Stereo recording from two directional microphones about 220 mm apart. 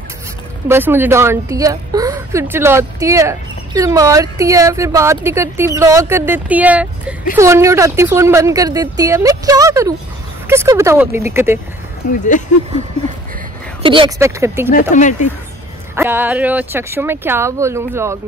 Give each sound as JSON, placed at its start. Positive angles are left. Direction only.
{"t": 0.7, "sound": "a woman's voice", "side_deg": -10}
{"t": 12.1, "sound": "speech", "side_deg": 35}
{"t": 13.8, "sound": "a woman's voice", "side_deg": -20}
{"t": 14.7, "sound": "speech", "side_deg": 35}
{"t": 16.0, "sound": "a woman's voice", "side_deg": -10}